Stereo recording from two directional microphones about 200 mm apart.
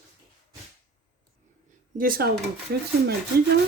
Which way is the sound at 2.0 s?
45° right (ahead or behind).